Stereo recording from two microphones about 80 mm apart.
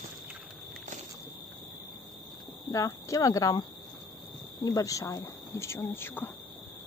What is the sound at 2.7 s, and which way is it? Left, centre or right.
Speech, left.